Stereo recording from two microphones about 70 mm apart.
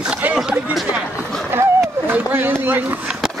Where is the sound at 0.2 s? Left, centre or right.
Right.